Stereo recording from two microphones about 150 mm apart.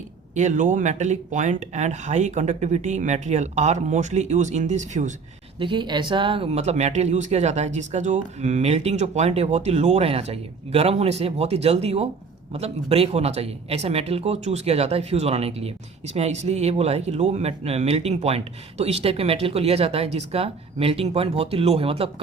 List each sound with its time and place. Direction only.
0.3 s speech: 55° right (ahead or behind)
5.5 s speech: 35° right (ahead or behind)